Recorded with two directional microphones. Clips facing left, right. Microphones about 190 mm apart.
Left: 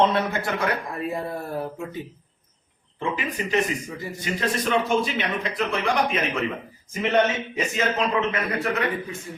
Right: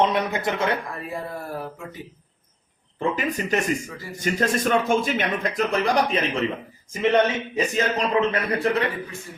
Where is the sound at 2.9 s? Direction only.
45° right (ahead or behind).